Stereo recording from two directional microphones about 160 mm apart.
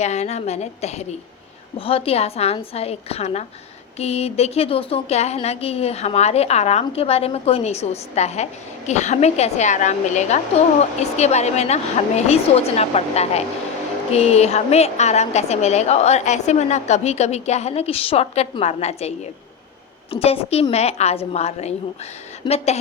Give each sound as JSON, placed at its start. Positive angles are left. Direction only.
{"t": 0.0, "sound": "a woman's voice", "side_deg": 45}